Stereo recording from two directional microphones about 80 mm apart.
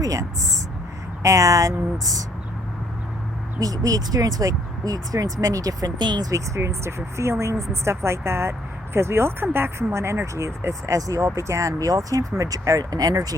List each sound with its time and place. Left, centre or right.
0.0 s a sound: right
1.2 s speech: right
3.6 s speech: right
6.0 s speech: right
6.3 s speech: right